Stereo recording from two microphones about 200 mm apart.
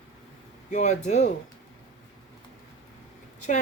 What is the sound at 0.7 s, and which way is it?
Speech, 35° left (ahead or behind).